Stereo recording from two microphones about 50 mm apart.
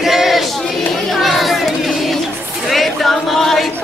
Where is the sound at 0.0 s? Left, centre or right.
Centre.